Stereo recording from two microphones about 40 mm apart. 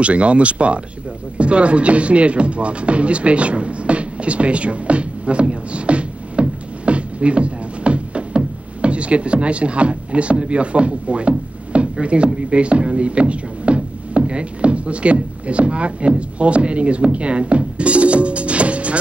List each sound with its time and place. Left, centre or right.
0.0 s speech: right
6.9 s music: right
12.4 s speech: right